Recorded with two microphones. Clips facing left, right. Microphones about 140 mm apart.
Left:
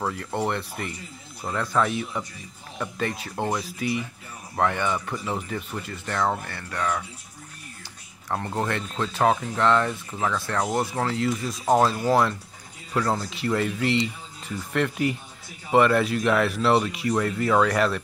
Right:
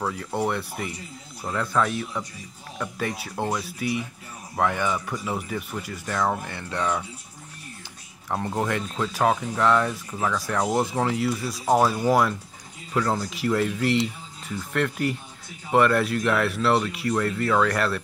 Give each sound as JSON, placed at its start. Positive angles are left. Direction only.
{"t": 0.2, "sound": "speech", "side_deg": -5}
{"t": 1.4, "sound": "speech", "side_deg": 5}
{"t": 6.5, "sound": "speech", "side_deg": -20}
{"t": 8.3, "sound": "speech", "side_deg": -10}
{"t": 11.2, "sound": "speech", "side_deg": -5}